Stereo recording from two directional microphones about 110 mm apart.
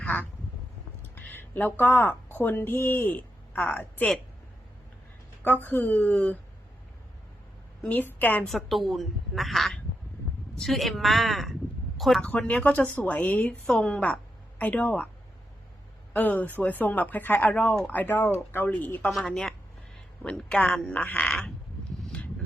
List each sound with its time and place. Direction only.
0.0 s quack: 10° left (ahead or behind)
1.1 s a woman's voice: 20° left (ahead or behind)
5.4 s speech: 15° left (ahead or behind)
7.9 s speech: 15° left (ahead or behind)
8.4 s a woman's voice: centre (ahead or behind)
12.2 s speech: 10° left (ahead or behind)
16.1 s speech: 15° left (ahead or behind)
19.0 s a woman's voice: 5° left (ahead or behind)